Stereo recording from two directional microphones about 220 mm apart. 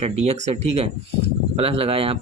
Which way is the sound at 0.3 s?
30° right (ahead or behind).